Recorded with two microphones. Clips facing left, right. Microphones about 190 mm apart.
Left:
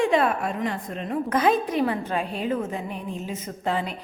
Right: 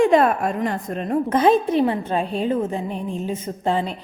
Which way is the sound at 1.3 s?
25° right (ahead or behind).